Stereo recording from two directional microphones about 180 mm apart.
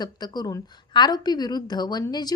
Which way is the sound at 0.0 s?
20° left (ahead or behind).